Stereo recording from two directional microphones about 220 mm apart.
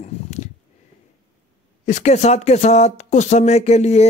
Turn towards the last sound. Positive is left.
turn(degrees=30)  # may be behind; listen again after turning